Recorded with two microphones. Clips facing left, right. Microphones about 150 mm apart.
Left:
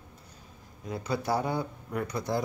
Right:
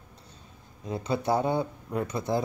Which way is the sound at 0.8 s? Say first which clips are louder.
Right 3 dB; 25° right (ahead or behind).